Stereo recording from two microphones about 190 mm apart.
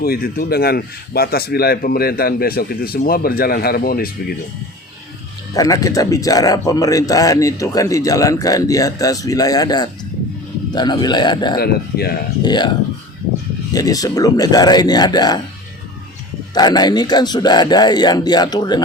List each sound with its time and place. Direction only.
0.0 s speech: 55° left (ahead or behind)
5.5 s a man's voice: 20° left (ahead or behind)
11.5 s speech: 55° left (ahead or behind)
12.4 s a man's voice: 25° left (ahead or behind)
13.7 s a man's voice: 20° left (ahead or behind)
16.6 s a man's voice: 20° left (ahead or behind)